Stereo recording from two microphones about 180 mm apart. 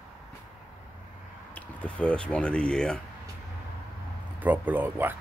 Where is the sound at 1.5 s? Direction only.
5° left (ahead or behind).